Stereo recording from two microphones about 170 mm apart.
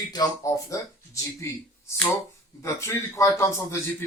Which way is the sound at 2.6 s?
15° left (ahead or behind).